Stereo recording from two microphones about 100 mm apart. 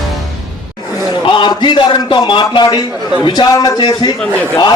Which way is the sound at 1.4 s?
50° left (ahead or behind).